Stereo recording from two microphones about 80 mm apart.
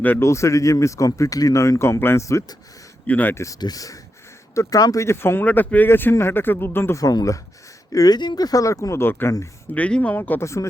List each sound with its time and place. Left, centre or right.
0.2 s speech: left
3.1 s speech: left
3.3 s speech: left
6.9 s speech: left
9.7 s speech: centre
10.4 s speech: left